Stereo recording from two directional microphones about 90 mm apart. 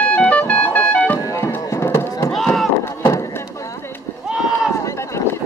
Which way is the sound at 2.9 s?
35° left (ahead or behind).